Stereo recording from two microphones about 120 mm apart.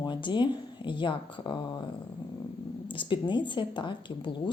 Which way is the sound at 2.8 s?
45° left (ahead or behind).